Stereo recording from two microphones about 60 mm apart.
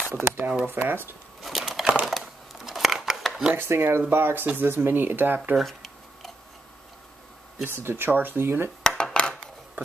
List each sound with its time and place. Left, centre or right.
0.1 s speech: right
1.4 s crumpling: centre
2.0 s a sound: centre
3.5 s speech: right
5.6 s tick-tock: centre
7.6 s speech: right
8.8 s dishes: centre